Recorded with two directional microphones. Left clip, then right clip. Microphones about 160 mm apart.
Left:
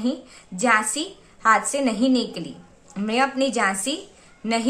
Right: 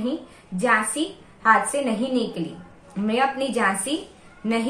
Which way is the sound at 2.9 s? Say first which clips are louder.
Even; 35° left (ahead or behind).